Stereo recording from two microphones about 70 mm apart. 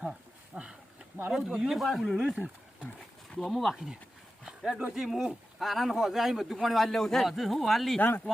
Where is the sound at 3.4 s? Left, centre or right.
Centre.